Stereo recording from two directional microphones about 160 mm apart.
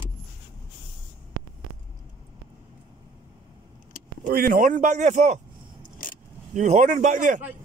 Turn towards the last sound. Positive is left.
turn(degrees=-55)  # may be behind; listen again after turning